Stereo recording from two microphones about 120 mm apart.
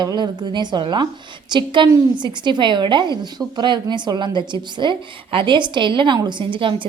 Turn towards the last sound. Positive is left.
turn(degrees=-45)  # may be behind; listen again after turning